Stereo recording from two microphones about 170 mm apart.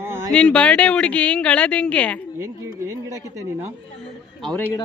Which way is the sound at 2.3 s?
15° right (ahead or behind).